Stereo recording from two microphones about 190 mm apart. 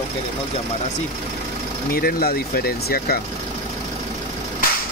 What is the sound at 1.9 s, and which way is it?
Speech, 50° left (ahead or behind).